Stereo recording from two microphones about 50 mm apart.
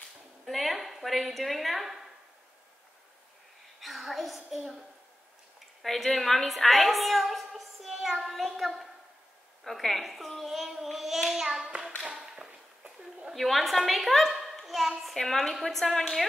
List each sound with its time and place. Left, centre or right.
0.5 s a child's voice: centre
3.8 s a woman's voice: centre
5.8 s a sound: centre
6.1 s a woman's voice: centre
12.0 s speech: right
12.3 s a sound: centre
13.3 s a child's voice: centre